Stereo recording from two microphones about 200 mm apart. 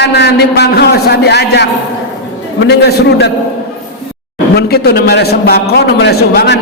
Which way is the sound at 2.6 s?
55° left (ahead or behind).